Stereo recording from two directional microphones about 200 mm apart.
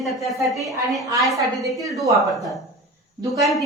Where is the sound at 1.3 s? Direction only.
15° right (ahead or behind).